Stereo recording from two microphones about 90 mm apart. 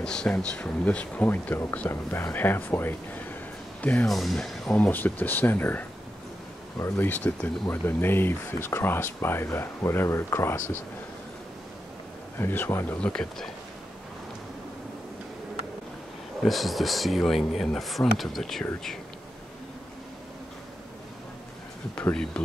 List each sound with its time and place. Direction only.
0.0 s speech: 10° left (ahead or behind)
4.1 s speech: centre (ahead or behind); by 10.8 s 30° left (ahead or behind)
12.4 s speech: 25° left (ahead or behind)
13.0 s speech: 10° left (ahead or behind)
16.4 s speech: centre (ahead or behind)